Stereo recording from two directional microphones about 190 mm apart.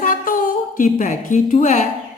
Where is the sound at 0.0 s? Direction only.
45° left (ahead or behind).